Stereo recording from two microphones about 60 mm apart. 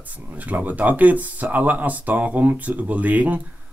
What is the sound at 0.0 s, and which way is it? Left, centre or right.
Speech, right.